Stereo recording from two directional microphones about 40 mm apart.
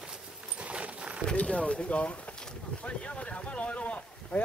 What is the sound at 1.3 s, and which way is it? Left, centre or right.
Speech, left.